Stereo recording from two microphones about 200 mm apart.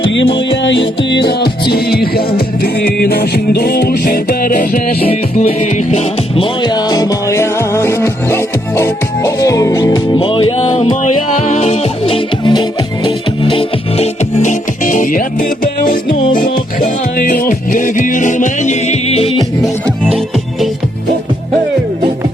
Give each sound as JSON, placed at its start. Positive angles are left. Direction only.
{"t": 0.0, "sound": "music", "side_deg": 65}
{"t": 11.0, "sound": "music", "side_deg": 35}
{"t": 17.2, "sound": "music", "side_deg": 45}